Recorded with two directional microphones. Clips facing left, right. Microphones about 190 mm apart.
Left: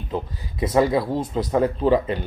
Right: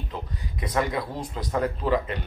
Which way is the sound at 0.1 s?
30° left (ahead or behind).